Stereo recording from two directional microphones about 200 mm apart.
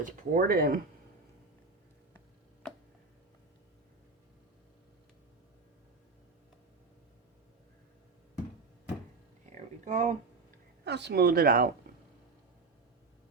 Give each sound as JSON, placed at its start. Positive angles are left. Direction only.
{"t": 0.0, "sound": "speech", "side_deg": -45}
{"t": 9.8, "sound": "speech", "side_deg": -35}
{"t": 10.8, "sound": "speech", "side_deg": -55}